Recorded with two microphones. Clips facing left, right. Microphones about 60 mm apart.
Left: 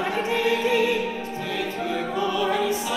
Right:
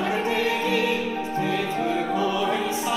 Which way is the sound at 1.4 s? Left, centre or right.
Centre.